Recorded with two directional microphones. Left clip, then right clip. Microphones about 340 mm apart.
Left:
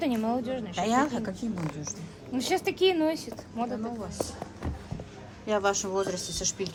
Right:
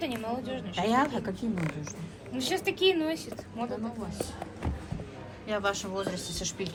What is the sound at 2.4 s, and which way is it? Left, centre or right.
A woman's voice, left.